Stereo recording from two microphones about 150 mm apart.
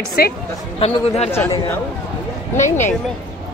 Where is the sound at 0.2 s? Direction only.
90° left.